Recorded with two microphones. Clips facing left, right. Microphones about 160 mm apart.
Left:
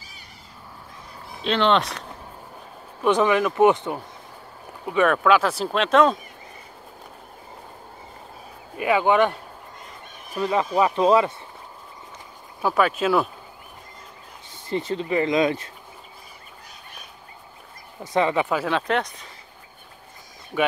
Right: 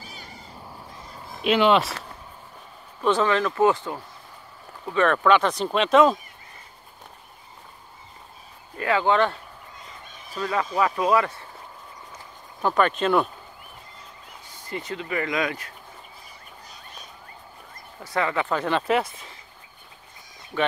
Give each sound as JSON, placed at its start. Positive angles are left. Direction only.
{"t": 1.4, "sound": "speech", "side_deg": -10}
{"t": 3.0, "sound": "speech", "side_deg": 15}
{"t": 8.7, "sound": "speech", "side_deg": 15}
{"t": 12.6, "sound": "speech", "side_deg": 5}
{"t": 14.7, "sound": "speech", "side_deg": 30}
{"t": 18.0, "sound": "speech", "side_deg": 20}
{"t": 18.6, "sound": "speech", "side_deg": 0}